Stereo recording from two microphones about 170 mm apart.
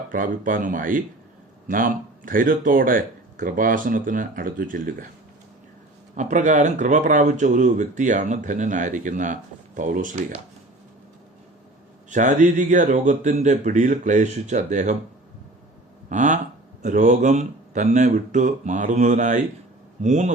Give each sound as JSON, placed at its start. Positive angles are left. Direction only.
{"t": 0.1, "sound": "speech", "side_deg": -50}
{"t": 6.1, "sound": "speech", "side_deg": -45}
{"t": 12.1, "sound": "speech", "side_deg": -45}
{"t": 16.0, "sound": "speech", "side_deg": -45}